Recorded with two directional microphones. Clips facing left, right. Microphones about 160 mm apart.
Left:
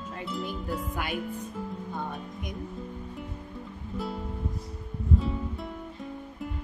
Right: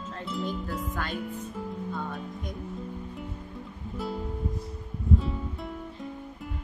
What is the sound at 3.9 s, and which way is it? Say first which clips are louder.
Music: right 1 dB; centre (ahead or behind).